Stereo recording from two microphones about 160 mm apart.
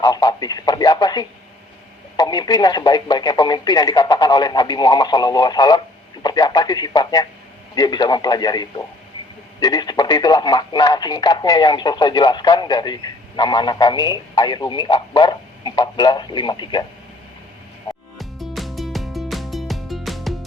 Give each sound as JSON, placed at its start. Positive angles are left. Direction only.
{"t": 0.0, "sound": "speech", "side_deg": 25}
{"t": 18.2, "sound": "music", "side_deg": 0}